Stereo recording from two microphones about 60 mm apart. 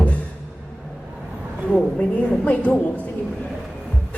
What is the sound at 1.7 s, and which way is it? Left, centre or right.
Music, left.